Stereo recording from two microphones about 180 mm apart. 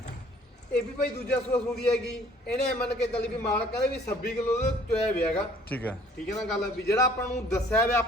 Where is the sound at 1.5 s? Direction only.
5° left (ahead or behind).